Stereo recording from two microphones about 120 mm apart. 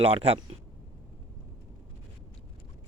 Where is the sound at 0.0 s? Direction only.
60° right (ahead or behind).